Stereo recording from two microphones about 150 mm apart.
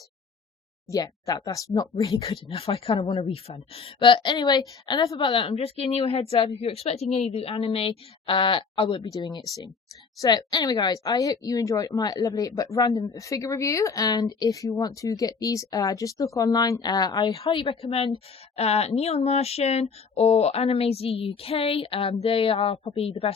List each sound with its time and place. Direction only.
0.9 s a woman's voice: 25° left (ahead or behind)
2.0 s a woman's voice: 40° left (ahead or behind)